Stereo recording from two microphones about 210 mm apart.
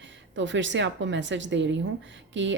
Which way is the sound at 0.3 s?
60° right (ahead or behind).